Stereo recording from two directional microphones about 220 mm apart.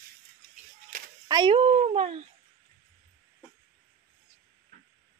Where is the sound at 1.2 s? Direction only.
20° right (ahead or behind).